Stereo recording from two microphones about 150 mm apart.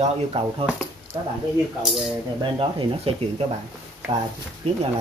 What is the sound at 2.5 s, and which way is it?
Speech, 35° right (ahead or behind).